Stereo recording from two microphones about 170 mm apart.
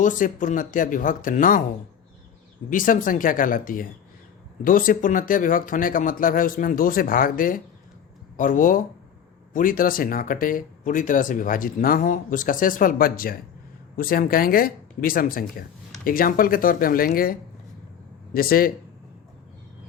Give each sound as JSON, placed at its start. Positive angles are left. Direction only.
{"t": 0.0, "sound": "speech", "side_deg": 50}
{"t": 2.6, "sound": "speech", "side_deg": 55}
{"t": 18.3, "sound": "speech", "side_deg": 60}